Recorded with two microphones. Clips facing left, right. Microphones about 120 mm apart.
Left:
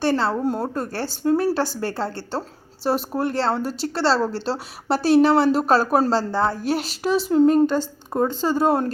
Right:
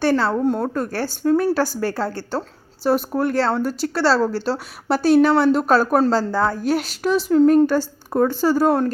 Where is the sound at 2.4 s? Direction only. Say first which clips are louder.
Right 2 dB; centre (ahead or behind).